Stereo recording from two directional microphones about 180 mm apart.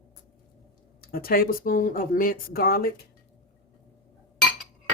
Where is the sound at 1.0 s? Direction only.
55° left (ahead or behind).